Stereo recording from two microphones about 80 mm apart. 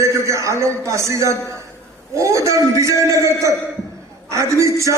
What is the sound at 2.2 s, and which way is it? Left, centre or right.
A man's voice, right.